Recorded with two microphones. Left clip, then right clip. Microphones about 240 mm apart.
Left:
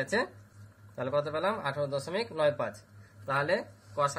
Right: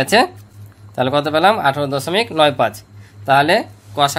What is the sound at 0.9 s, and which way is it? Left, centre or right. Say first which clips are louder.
Speech: right 15 dB; right.